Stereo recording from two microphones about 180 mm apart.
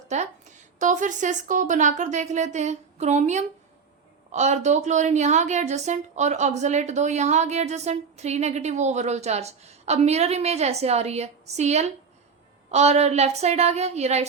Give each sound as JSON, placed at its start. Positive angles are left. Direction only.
{"t": 0.1, "sound": "a woman's voice", "side_deg": -40}